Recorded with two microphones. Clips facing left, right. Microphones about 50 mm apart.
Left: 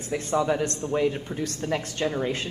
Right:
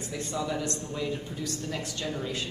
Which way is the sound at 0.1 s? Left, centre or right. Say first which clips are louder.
Left 8 dB; left.